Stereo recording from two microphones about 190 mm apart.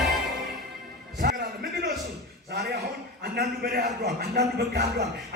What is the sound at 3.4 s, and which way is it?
Speech, 55° right (ahead or behind).